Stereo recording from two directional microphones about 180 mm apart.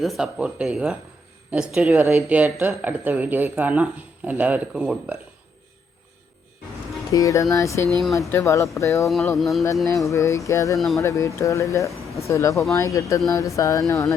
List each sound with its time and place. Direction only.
0.0 s speech: centre (ahead or behind)
7.1 s speech: 20° left (ahead or behind)
9.0 s speech: centre (ahead or behind)
9.8 s speech: 15° left (ahead or behind)
10.8 s speech: centre (ahead or behind)
11.0 s speech: 15° left (ahead or behind)